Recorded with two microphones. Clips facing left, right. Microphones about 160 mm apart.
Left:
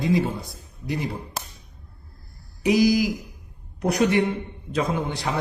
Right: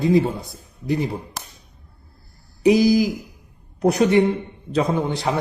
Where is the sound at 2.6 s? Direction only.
25° right (ahead or behind).